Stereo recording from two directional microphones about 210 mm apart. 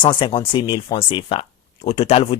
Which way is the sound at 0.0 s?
25° left (ahead or behind).